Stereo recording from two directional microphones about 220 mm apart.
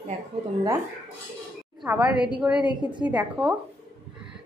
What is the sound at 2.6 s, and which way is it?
Speech, 20° left (ahead or behind).